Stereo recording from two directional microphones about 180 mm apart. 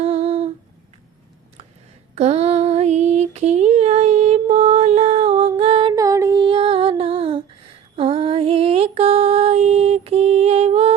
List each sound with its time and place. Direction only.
0.0 s humming: 35° right (ahead or behind)
2.1 s female singing: 35° right (ahead or behind)